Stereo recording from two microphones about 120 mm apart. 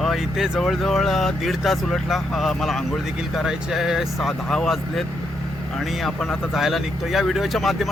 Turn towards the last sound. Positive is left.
turn(degrees=0)  # may be behind; listen again after turning